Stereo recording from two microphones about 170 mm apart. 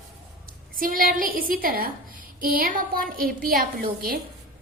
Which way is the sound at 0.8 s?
55° right (ahead or behind).